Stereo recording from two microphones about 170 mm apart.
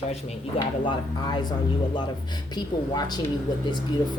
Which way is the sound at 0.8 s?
25° left (ahead or behind).